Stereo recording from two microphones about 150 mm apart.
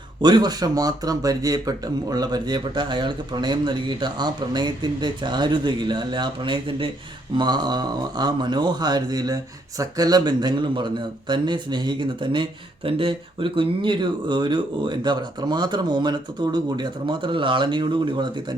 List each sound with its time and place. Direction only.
0.2 s speech: 30° right (ahead or behind)